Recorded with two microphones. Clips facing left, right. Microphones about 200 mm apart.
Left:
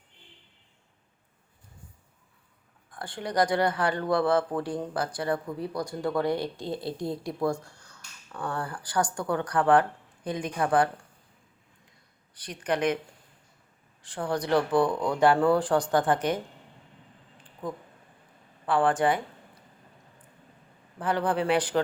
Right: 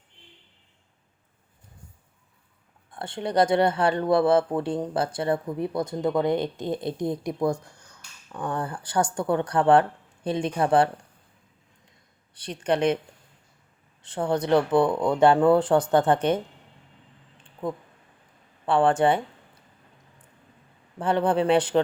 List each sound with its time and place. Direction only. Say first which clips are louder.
2.9 s speech: right 4 dB; 25° right (ahead or behind)
12.3 s speech: right 4 dB; 25° right (ahead or behind)
14.0 s speech: right 4 dB; 25° right (ahead or behind)
18.6 s speech: right 4 dB; 25° right (ahead or behind)
21.0 s speech: right 4 dB; 25° right (ahead or behind)